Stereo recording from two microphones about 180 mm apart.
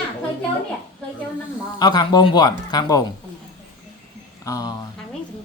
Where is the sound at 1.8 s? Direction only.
25° left (ahead or behind).